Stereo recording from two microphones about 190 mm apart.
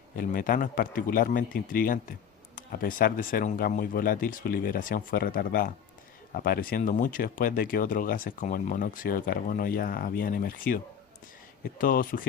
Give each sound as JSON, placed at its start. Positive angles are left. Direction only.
{"t": 0.2, "sound": "speech", "side_deg": 45}
{"t": 11.8, "sound": "speech", "side_deg": 45}